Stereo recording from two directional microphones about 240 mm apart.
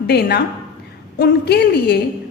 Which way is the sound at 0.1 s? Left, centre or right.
Left.